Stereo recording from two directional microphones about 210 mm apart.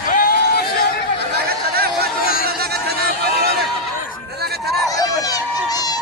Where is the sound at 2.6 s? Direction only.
50° right (ahead or behind).